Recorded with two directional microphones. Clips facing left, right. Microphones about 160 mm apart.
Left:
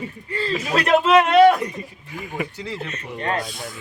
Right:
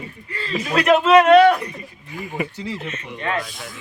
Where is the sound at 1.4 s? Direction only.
25° left (ahead or behind).